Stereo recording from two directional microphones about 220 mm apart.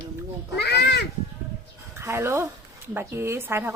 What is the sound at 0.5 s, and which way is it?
Speech, 50° left (ahead or behind).